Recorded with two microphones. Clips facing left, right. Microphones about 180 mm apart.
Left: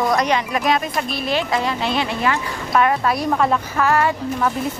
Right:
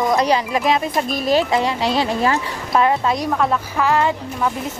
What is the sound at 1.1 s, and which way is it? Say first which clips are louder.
Speech: right 6 dB; 40° right (ahead or behind).